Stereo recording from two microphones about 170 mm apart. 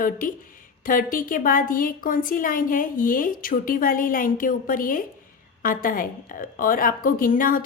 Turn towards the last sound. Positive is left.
turn(degrees=55)  # may be behind; listen again after turning